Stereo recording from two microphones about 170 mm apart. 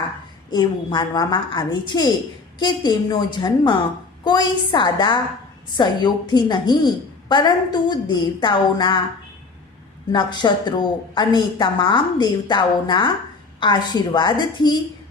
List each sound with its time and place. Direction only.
0.5 s a woman's voice: 25° left (ahead or behind)
10.1 s a woman's voice: 25° left (ahead or behind)